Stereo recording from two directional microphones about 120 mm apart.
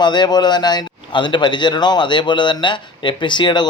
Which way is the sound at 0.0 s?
40° left (ahead or behind).